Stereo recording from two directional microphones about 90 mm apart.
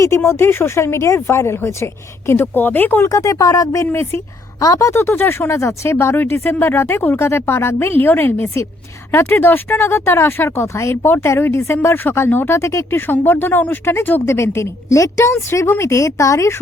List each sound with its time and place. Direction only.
0.0 s speech: 30° left (ahead or behind)
3.1 s speech: 40° left (ahead or behind)